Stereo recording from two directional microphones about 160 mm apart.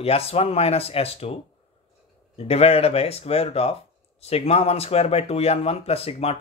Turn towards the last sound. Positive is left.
turn(degrees=40)  # may be behind; listen again after turning